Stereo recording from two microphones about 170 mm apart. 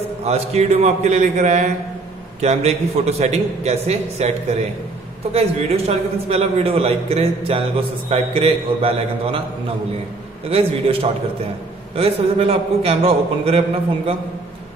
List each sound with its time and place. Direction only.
0.2 s a man's voice: 40° right (ahead or behind)
10.5 s a man's voice: 35° right (ahead or behind)